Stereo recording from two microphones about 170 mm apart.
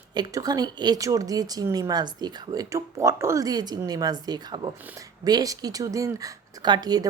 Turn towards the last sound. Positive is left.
turn(degrees=-25)  # may be behind; listen again after turning